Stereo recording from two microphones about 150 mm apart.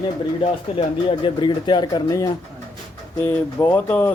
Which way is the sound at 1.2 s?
30° left (ahead or behind).